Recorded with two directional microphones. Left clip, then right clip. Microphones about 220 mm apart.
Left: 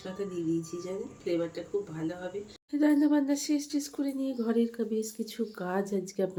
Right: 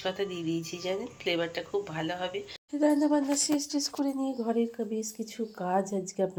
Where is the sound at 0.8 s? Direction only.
45° right (ahead or behind).